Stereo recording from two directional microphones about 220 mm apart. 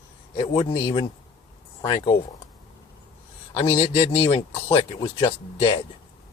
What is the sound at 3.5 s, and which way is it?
Speech, 10° left (ahead or behind).